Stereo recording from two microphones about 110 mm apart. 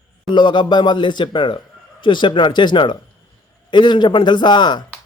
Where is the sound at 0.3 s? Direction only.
45° left (ahead or behind).